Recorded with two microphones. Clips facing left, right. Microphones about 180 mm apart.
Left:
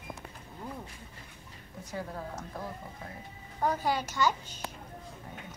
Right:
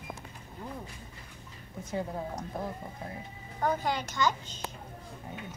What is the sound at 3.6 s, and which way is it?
A child's voice, 10° left (ahead or behind).